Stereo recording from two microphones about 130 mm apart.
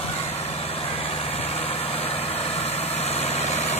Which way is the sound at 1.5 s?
50° left (ahead or behind).